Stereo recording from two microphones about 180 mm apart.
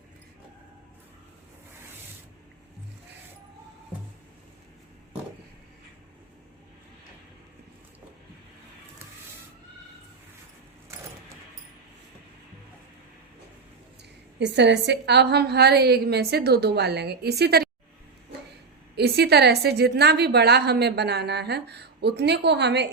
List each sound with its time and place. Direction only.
14.3 s a woman's voice: 75° right (ahead or behind)
18.9 s a woman's voice: 65° right (ahead or behind)